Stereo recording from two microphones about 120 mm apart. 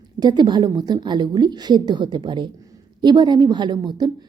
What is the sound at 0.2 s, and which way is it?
A woman's voice, 35° right (ahead or behind).